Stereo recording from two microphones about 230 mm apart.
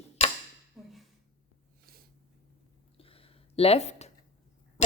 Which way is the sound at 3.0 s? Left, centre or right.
Left.